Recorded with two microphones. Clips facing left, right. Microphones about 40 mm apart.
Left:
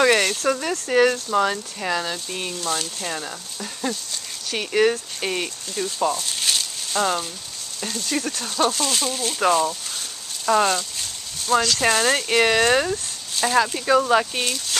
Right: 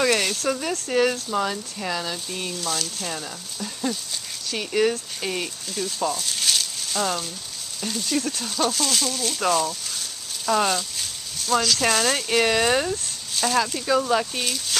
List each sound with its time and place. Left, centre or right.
0.0 s speech: centre
2.5 s speech: centre
2.8 s speech: centre
14.4 s speech: centre